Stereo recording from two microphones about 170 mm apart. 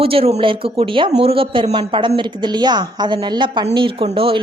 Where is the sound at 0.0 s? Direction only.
35° right (ahead or behind).